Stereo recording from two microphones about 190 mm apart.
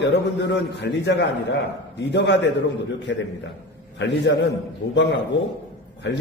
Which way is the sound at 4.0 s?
65° left (ahead or behind).